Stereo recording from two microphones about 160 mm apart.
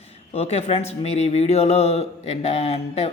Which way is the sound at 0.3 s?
40° left (ahead or behind).